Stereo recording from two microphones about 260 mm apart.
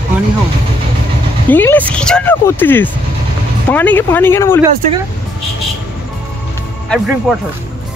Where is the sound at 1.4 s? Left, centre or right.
Centre.